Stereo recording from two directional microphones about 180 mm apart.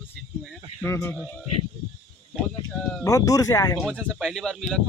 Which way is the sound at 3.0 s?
20° left (ahead or behind).